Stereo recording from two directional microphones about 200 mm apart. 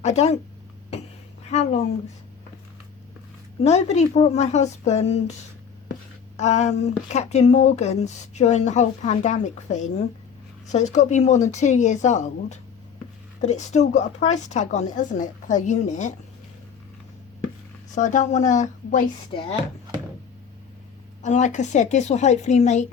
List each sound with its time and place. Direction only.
0.0 s speech: 35° left (ahead or behind)
1.5 s speech: 35° left (ahead or behind)
3.6 s speech: 35° left (ahead or behind)
17.9 s speech: 40° left (ahead or behind)
19.3 s speech: 25° left (ahead or behind)
21.2 s speech: 35° left (ahead or behind)